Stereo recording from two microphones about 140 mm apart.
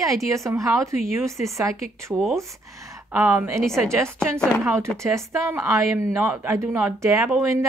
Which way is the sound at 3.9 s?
20° right (ahead or behind).